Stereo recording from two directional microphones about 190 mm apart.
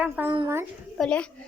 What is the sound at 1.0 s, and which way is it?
Speech, 5° left (ahead or behind).